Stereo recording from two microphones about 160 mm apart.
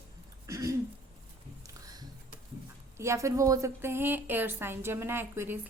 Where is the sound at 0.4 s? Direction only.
20° right (ahead or behind).